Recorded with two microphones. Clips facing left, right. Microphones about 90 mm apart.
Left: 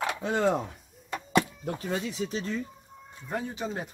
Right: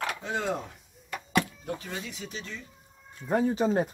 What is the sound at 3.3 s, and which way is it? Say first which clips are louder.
Speech: right 8 dB; 35° right (ahead or behind).